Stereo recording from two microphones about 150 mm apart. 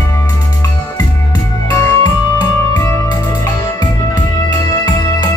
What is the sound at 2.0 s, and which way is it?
Music, 20° left (ahead or behind).